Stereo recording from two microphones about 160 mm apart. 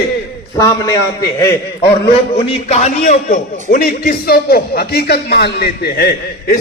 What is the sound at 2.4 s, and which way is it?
A man's voice, 40° left (ahead or behind).